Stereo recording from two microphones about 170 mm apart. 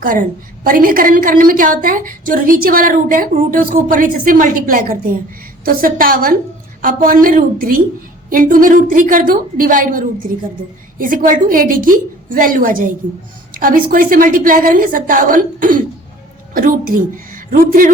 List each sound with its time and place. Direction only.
0.0 s a woman's voice: 55° right (ahead or behind)